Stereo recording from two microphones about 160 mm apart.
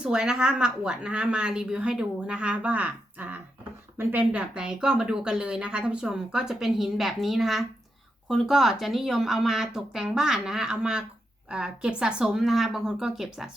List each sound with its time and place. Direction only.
0.0 s speech: 5° right (ahead or behind)